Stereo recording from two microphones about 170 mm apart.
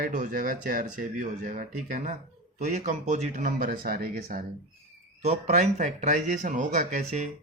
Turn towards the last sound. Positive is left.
turn(degrees=-45)  # may be behind; listen again after turning